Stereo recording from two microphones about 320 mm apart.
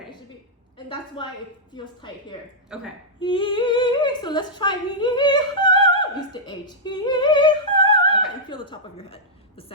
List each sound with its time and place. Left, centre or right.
0.9 s a woman's voice: centre
2.7 s a woman's voice: centre
3.2 s speech: centre